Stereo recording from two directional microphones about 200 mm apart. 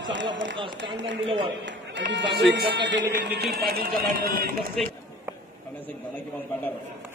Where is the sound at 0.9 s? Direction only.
65° right (ahead or behind).